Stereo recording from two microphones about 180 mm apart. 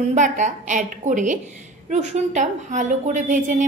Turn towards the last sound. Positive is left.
turn(degrees=-45)  # may be behind; listen again after turning